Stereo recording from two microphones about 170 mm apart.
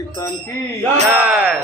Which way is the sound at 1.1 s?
10° right (ahead or behind).